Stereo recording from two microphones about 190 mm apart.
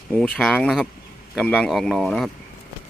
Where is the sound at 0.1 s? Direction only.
5° left (ahead or behind).